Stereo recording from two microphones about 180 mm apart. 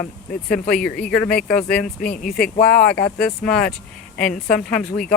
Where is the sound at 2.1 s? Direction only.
50° left (ahead or behind).